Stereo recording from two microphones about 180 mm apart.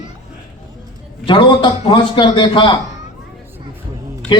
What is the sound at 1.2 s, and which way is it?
A man's voice, 25° left (ahead or behind).